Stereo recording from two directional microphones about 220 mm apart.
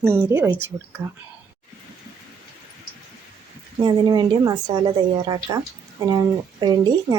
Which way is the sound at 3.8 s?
20° right (ahead or behind).